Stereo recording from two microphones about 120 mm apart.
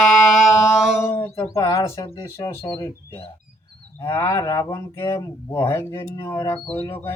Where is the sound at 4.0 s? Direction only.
25° left (ahead or behind).